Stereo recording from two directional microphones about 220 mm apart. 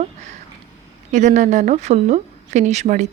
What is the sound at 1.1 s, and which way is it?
A woman's voice, 35° right (ahead or behind).